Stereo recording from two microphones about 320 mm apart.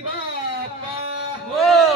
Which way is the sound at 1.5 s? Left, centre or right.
Centre.